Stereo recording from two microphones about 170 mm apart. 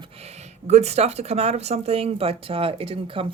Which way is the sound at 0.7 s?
40° right (ahead or behind).